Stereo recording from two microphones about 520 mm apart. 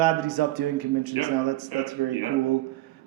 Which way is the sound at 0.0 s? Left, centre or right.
Right.